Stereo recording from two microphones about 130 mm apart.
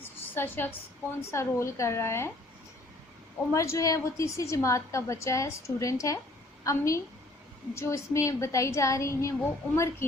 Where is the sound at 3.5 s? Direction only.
25° left (ahead or behind).